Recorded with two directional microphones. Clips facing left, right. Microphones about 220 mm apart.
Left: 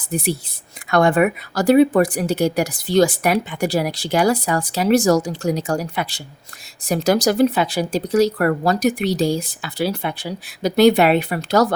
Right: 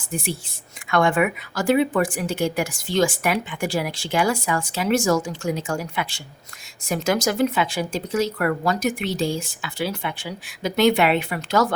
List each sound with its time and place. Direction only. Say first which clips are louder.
0.1 s speech: left 6 dB; 40° left (ahead or behind)